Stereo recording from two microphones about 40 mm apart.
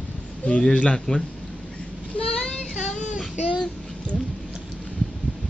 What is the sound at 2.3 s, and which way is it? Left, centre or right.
Child singing, centre.